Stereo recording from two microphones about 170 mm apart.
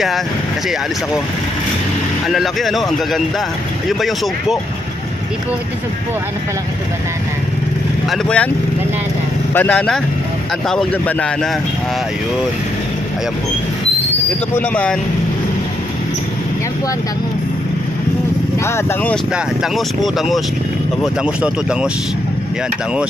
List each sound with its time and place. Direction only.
2.2 s speech: centre (ahead or behind)
8.1 s speech: 5° left (ahead or behind)
9.5 s speech: 10° left (ahead or behind)
14.5 s speech: 5° left (ahead or behind)
19.3 s speech: centre (ahead or behind)